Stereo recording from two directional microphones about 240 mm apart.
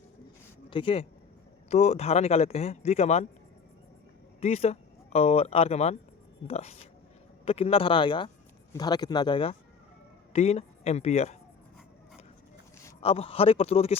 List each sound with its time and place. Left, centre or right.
0.7 s speech: left
4.4 s speech: left
13.0 s speech: left